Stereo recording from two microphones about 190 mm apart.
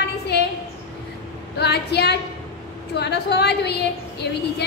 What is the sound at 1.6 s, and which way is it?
A woman's voice, 60° left (ahead or behind).